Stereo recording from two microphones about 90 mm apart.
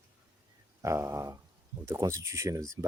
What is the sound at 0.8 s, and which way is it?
Speech, 35° right (ahead or behind).